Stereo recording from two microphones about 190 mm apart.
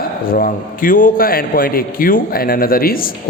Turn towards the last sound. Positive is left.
turn(degrees=50)  # may be behind; listen again after turning